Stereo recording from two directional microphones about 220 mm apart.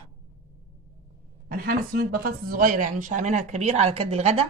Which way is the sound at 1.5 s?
45° right (ahead or behind).